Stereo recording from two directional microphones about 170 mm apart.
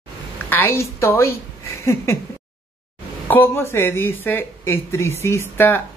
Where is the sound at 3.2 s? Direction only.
10° left (ahead or behind).